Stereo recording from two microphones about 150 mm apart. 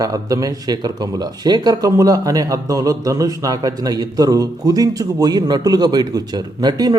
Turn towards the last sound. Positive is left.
turn(degrees=-25)  # may be behind; listen again after turning